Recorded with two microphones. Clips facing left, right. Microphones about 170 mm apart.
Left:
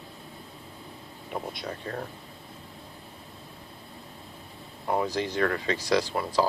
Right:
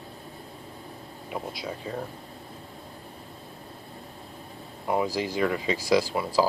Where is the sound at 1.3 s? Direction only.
5° right (ahead or behind).